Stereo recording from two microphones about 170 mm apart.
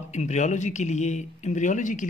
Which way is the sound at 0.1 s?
40° left (ahead or behind).